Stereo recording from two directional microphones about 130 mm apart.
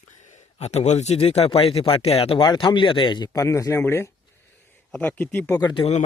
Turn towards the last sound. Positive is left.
turn(degrees=45)  # may be behind; listen again after turning